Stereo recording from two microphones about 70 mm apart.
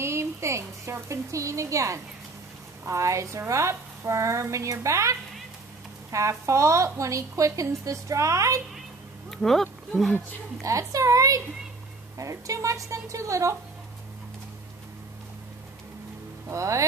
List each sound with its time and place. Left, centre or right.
0.0 s a woman's voice: right
6.1 s a woman's voice: right
9.3 s speech: centre
10.6 s a woman's voice: right
16.4 s a woman's voice: right